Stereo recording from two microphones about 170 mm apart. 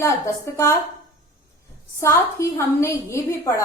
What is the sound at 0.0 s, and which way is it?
Speech, 15° left (ahead or behind).